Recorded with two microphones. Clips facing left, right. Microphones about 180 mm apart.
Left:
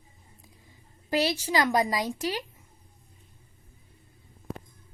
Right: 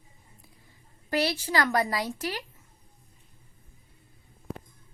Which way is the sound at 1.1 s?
15° left (ahead or behind).